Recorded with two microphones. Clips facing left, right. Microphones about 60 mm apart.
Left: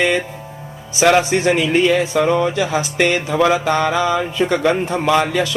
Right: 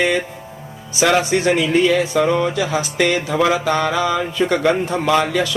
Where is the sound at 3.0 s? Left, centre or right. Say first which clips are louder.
Left 1 dB; left.